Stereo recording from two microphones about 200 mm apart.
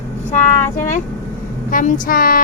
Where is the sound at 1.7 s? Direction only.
45° left (ahead or behind).